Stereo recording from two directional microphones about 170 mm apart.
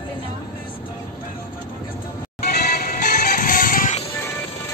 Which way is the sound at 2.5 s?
65° left (ahead or behind).